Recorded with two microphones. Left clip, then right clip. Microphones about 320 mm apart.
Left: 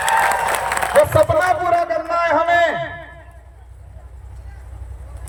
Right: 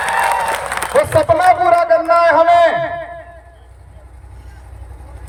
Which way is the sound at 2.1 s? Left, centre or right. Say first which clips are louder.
Right 4 dB; right.